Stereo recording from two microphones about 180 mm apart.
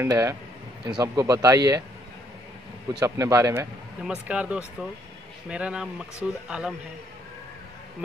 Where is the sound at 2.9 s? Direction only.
15° right (ahead or behind).